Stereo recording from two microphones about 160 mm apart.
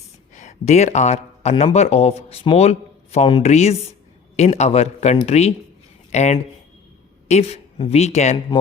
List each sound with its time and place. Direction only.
0.3 s speech: 45° left (ahead or behind)